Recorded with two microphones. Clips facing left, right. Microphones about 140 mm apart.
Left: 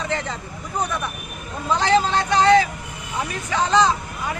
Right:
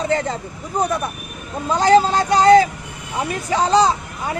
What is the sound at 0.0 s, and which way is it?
Speech, 40° right (ahead or behind).